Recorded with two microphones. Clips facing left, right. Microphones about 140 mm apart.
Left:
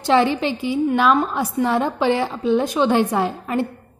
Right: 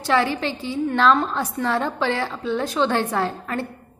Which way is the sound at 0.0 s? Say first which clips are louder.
Left 4 dB; 20° left (ahead or behind).